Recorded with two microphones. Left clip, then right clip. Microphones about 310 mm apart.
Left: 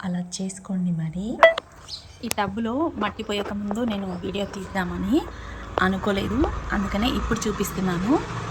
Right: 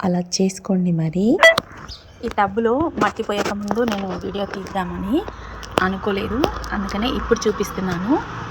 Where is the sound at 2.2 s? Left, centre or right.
Centre.